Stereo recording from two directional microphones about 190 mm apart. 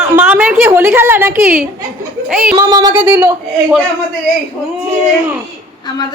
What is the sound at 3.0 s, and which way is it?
Speech, 15° right (ahead or behind).